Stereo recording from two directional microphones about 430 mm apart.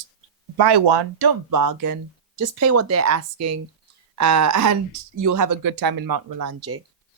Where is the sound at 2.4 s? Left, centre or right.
Right.